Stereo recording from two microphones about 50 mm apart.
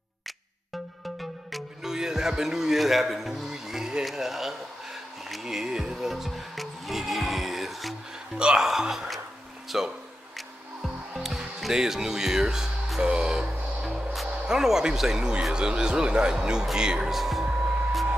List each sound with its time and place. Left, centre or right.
1.2 s speech: centre
8.4 s speech: centre
8.6 s speech: centre
10.3 s music: centre
14.1 s speech: centre
17.1 s speech: centre